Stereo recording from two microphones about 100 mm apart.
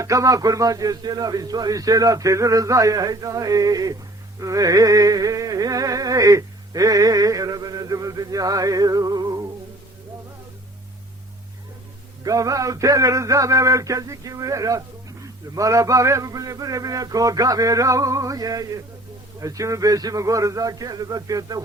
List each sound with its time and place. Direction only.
0.0 s speech: 35° right (ahead or behind)
12.2 s speech: 35° right (ahead or behind)